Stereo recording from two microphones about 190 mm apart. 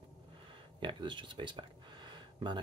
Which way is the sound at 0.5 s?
25° right (ahead or behind).